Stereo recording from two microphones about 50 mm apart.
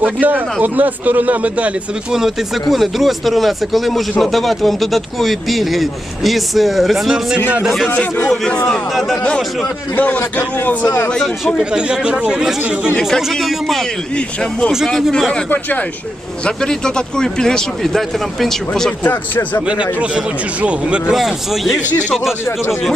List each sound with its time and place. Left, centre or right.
0.0 s a man's voice: right
2.1 s speech: centre
8.4 s speech: centre
9.9 s a man's voice: left
11.6 s a man's voice: centre
13.0 s speech: centre
15.4 s a man's voice: left
16.5 s speech: centre
19.0 s a man's voice: left
19.6 s a man's voice: right
21.1 s speech: centre
22.4 s speech: left